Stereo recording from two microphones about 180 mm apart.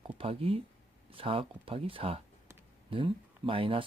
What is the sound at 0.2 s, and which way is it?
Speech, 30° right (ahead or behind).